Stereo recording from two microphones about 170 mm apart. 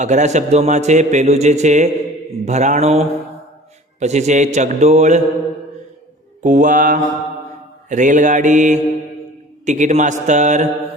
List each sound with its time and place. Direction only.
0.0 s a man's voice: 45° right (ahead or behind)
2.4 s mantra: 45° right (ahead or behind)
4.0 s a man's voice: 40° right (ahead or behind)
6.4 s a man's voice: 45° right (ahead or behind)